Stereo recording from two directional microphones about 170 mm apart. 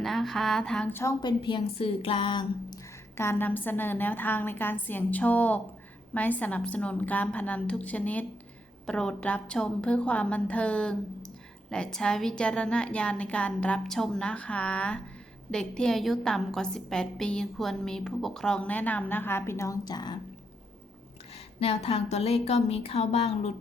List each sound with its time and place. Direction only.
0.0 s a woman's voice: centre (ahead or behind)
1.2 s a woman's voice: 25° left (ahead or behind)
21.3 s speech: 35° left (ahead or behind)